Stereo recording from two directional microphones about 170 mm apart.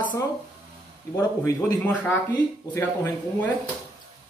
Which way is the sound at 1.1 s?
15° left (ahead or behind).